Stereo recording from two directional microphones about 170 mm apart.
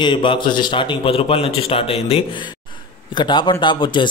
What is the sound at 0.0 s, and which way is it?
A man's voice, 30° left (ahead or behind).